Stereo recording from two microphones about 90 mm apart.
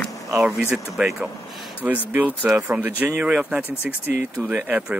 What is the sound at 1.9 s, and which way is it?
Speech, 20° right (ahead or behind).